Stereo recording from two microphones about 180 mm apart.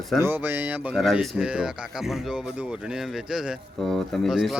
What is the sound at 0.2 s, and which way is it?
Speech, 10° right (ahead or behind).